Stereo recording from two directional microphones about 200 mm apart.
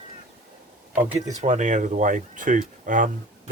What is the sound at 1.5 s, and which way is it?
Speech, 35° right (ahead or behind).